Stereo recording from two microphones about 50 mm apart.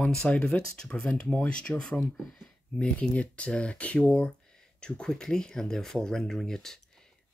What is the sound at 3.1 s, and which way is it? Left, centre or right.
Speech, left.